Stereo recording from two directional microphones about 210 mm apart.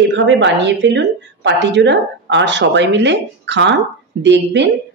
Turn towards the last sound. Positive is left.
turn(degrees=-55)  # may be behind; listen again after turning